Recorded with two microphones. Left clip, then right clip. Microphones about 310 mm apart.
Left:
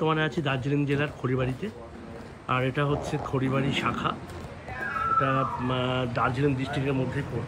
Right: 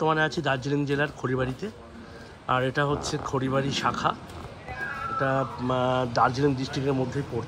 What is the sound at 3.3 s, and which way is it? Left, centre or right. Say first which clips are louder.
Speech: right 1 dB; right.